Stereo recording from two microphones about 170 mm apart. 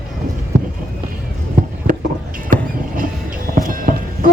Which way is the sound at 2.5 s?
55° right (ahead or behind).